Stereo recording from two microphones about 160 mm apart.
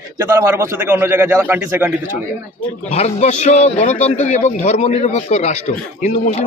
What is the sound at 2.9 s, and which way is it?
A man's voice, 40° left (ahead or behind).